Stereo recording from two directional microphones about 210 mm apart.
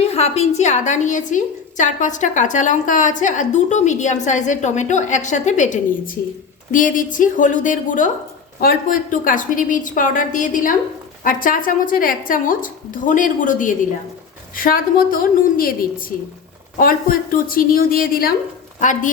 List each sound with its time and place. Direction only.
0.0 s a woman's voice: 30° left (ahead or behind)